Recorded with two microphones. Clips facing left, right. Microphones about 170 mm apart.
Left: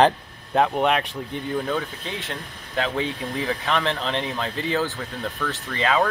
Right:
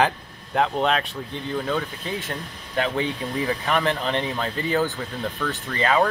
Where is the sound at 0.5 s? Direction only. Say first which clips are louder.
Left 2 dB; 15° left (ahead or behind).